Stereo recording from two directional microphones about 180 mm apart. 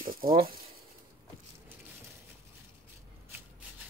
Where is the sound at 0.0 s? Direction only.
55° right (ahead or behind).